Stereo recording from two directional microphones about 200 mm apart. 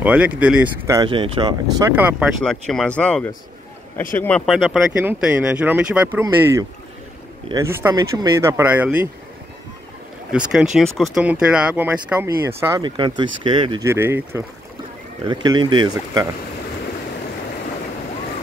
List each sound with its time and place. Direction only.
0.0 s speech: 5° right (ahead or behind)
1.0 s speech: 25° right (ahead or behind)
2.0 s speech: 5° right (ahead or behind)
4.5 s speech: centre (ahead or behind)
10.3 s speech: 5° right (ahead or behind); by 13.8 s 25° right (ahead or behind)
13.8 s speech: 10° right (ahead or behind)